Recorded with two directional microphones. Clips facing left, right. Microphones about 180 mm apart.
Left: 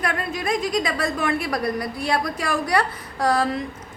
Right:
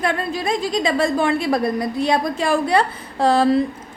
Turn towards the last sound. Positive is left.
turn(degrees=-25)  # may be behind; listen again after turning